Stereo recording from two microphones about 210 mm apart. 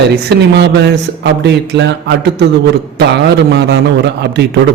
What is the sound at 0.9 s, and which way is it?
Speech, 55° right (ahead or behind).